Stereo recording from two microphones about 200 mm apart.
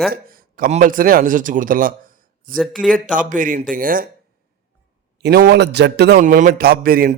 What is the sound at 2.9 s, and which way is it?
A man's voice, 40° right (ahead or behind).